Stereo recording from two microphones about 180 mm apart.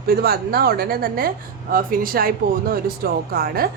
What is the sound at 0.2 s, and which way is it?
Speech, 60° right (ahead or behind).